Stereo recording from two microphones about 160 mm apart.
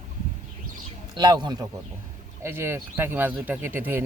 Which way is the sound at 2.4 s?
15° right (ahead or behind).